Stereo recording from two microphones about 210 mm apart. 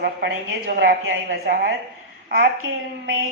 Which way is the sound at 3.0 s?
75° right (ahead or behind).